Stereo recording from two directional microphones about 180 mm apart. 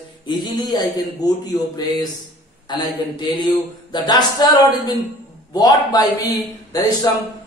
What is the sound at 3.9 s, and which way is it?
A man's voice, 25° left (ahead or behind).